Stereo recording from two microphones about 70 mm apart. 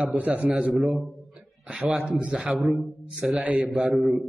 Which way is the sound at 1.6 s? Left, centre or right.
Centre.